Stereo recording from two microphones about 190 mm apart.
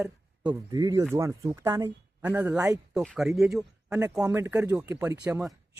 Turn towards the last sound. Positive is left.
turn(degrees=-5)  # may be behind; listen again after turning